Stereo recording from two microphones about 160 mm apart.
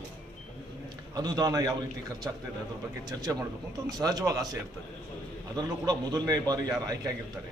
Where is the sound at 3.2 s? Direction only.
20° right (ahead or behind).